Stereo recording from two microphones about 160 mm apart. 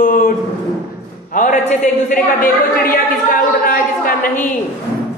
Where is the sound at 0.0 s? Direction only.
60° left (ahead or behind).